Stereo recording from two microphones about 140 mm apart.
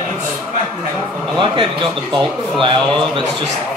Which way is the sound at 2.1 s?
35° right (ahead or behind).